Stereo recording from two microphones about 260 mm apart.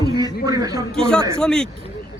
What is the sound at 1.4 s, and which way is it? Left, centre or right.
Speech, centre.